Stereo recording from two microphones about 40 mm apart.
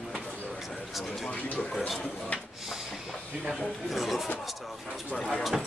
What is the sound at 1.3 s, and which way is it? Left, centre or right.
Speech, left.